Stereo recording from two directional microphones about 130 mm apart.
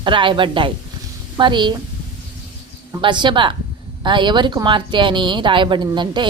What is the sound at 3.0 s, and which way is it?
Speech, 35° right (ahead or behind).